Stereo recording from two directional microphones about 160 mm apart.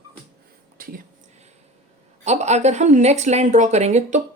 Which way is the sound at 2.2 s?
45° right (ahead or behind).